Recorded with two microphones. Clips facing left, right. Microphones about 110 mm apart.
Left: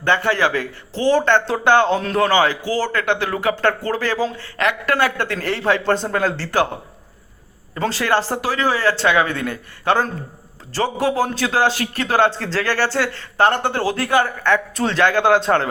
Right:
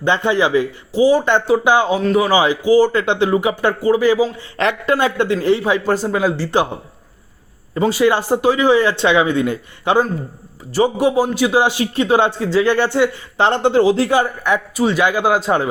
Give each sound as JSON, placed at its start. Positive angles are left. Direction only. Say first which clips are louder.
{"t": 0.0, "sound": "speech", "louder": "right 2 dB", "side_deg": -20}
{"t": 4.5, "sound": "speech", "louder": "right 3 dB", "side_deg": -25}
{"t": 7.8, "sound": "speech", "louder": "right 4 dB", "side_deg": -15}